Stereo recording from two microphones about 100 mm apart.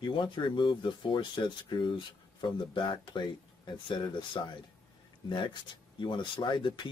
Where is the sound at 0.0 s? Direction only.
50° left (ahead or behind).